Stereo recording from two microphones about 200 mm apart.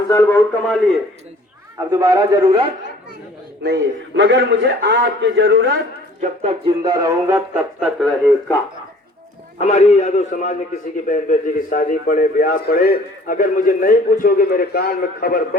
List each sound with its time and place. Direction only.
0.1 s speech: 15° left (ahead or behind)
1.9 s a man's voice: 20° right (ahead or behind)
3.6 s a man's voice: 60° right (ahead or behind)
6.2 s speech: 30° right (ahead or behind)
6.8 s a man's voice: 20° right (ahead or behind)
9.6 s a man's voice: 35° left (ahead or behind)